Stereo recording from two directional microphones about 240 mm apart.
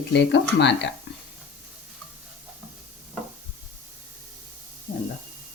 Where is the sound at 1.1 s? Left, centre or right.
Left.